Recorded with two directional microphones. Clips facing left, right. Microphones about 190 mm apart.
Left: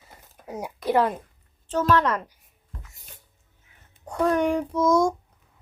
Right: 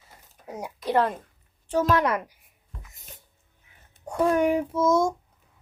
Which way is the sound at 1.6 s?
15° right (ahead or behind).